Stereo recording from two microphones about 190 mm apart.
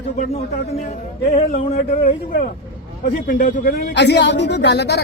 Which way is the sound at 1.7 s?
50° left (ahead or behind).